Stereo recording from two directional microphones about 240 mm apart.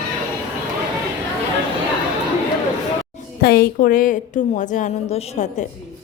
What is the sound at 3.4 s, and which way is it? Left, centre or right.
A woman's voice, left.